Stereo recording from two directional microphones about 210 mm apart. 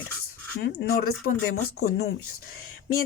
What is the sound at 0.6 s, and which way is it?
Speech, 50° left (ahead or behind).